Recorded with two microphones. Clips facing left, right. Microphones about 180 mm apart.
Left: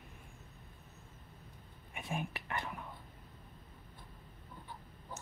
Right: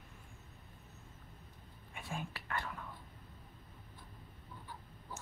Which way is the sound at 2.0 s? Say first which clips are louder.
Left 4 dB; 20° left (ahead or behind).